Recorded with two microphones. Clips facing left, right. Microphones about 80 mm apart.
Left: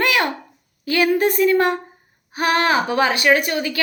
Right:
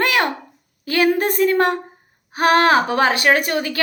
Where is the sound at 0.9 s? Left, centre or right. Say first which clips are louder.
Even; right.